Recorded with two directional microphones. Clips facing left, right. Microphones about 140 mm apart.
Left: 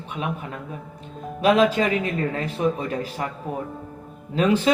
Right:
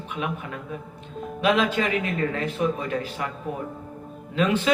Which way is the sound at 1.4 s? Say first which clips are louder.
Left 4 dB; 35° left (ahead or behind).